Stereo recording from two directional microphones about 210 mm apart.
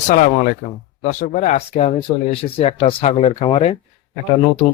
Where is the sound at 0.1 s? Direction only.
40° left (ahead or behind).